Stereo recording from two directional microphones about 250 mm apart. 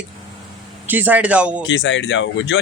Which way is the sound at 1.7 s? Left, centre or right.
Left.